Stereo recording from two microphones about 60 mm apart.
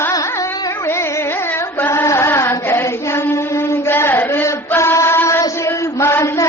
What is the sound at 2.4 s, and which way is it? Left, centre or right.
Child singing, left.